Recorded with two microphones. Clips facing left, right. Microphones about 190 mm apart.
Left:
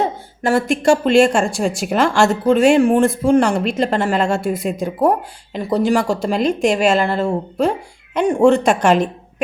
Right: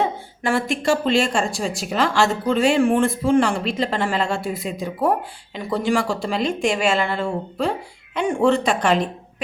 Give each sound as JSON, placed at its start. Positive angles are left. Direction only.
{"t": 0.0, "sound": "a woman's voice", "side_deg": 40}